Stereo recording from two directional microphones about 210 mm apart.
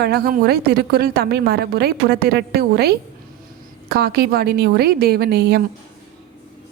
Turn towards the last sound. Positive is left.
turn(degrees=-50)  # may be behind; listen again after turning